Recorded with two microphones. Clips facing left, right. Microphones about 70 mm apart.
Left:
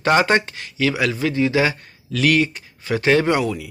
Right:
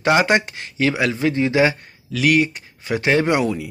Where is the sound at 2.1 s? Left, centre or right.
Centre.